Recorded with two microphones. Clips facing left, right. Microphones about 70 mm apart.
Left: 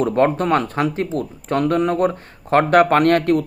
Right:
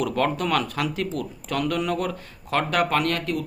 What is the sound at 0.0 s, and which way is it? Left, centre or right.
Speech, left.